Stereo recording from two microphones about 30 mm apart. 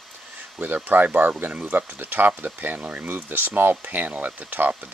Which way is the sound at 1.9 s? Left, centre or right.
Right.